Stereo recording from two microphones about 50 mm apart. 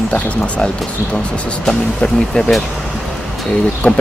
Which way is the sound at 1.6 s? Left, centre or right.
Centre.